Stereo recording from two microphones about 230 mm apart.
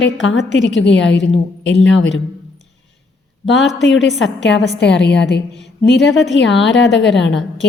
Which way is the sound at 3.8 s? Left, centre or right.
Left.